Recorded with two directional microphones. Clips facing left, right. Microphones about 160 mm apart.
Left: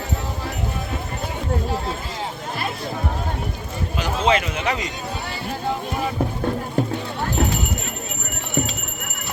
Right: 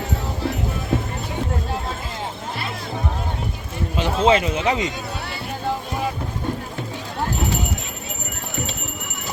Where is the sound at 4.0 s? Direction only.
30° right (ahead or behind).